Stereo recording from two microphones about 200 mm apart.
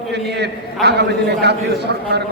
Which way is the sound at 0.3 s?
55° right (ahead or behind).